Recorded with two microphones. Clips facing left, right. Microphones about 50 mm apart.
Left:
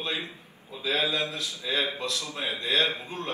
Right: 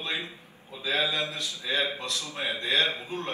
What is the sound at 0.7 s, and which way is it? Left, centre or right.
Speech, right.